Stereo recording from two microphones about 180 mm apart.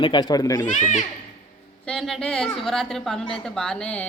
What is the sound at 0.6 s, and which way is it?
Speech, 45° left (ahead or behind).